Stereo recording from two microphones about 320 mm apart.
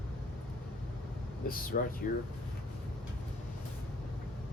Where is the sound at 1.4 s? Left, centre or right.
Left.